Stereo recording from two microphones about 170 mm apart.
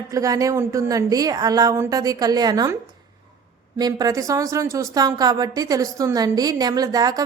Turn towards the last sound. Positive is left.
turn(degrees=-20)  # may be behind; listen again after turning